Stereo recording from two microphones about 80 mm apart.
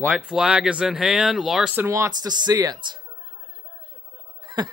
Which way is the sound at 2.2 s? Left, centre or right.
Right.